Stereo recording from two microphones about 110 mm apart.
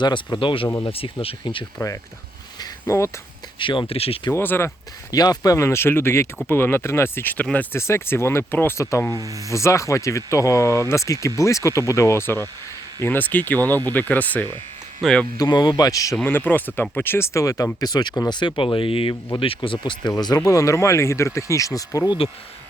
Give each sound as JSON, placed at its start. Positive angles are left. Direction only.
{"t": 0.0, "sound": "speech", "side_deg": 45}
{"t": 2.8, "sound": "speech", "side_deg": 25}
{"t": 3.6, "sound": "speech", "side_deg": 50}
{"t": 4.3, "sound": "speech", "side_deg": 20}
{"t": 5.1, "sound": "speech", "side_deg": 35}
{"t": 9.1, "sound": "speech", "side_deg": -30}
{"t": 9.5, "sound": "speech", "side_deg": 25}
{"t": 15.4, "sound": "speech", "side_deg": 40}
{"t": 16.2, "sound": "speech", "side_deg": 15}